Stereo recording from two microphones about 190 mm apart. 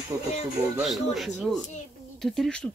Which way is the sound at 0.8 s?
Centre (ahead or behind).